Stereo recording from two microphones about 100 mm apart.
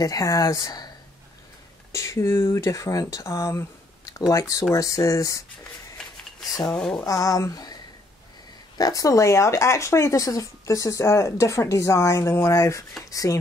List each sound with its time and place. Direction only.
0.0 s speech: 35° left (ahead or behind)
1.9 s speech: 30° left (ahead or behind)
6.7 s speech: 10° left (ahead or behind)
7.1 s speech: 35° left (ahead or behind)
8.7 s speech: 35° left (ahead or behind)